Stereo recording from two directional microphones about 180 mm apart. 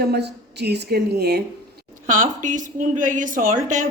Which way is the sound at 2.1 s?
45° right (ahead or behind).